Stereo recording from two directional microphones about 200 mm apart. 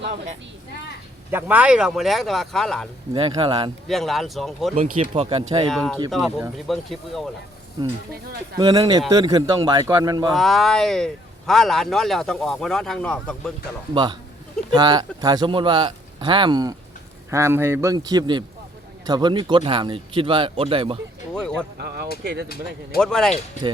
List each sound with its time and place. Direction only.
1.3 s speech: 10° right (ahead or behind)
3.1 s speech: 20° right (ahead or behind)
3.8 s speech: centre (ahead or behind)
4.7 s speech: 30° right (ahead or behind)
5.6 s speech: centre (ahead or behind)
8.5 s speech: 20° right (ahead or behind)
10.3 s speech: centre (ahead or behind)
13.9 s a man's voice: 25° right (ahead or behind)
21.3 s speech: 5° left (ahead or behind)
21.8 s speech: 50° right (ahead or behind)
23.0 s speech: 5° left (ahead or behind)